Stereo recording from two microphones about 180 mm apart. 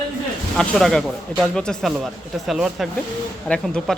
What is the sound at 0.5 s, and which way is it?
Speech, centre (ahead or behind).